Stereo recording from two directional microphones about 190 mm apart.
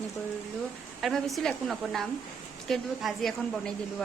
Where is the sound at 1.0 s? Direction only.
Centre (ahead or behind).